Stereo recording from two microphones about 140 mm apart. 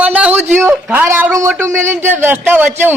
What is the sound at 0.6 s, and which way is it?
Speech, 10° right (ahead or behind).